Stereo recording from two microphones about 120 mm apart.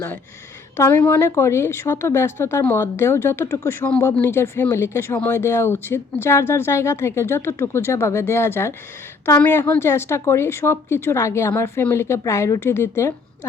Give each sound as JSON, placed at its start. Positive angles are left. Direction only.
{"t": 0.8, "sound": "speech", "side_deg": 15}